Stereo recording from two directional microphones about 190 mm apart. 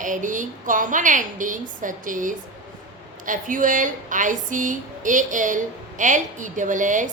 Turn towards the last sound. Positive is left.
turn(degrees=-40)  # may be behind; listen again after turning